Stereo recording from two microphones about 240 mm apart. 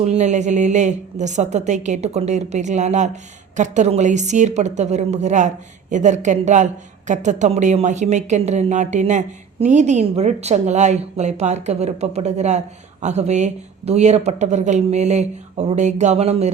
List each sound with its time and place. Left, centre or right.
0.0 s speech: right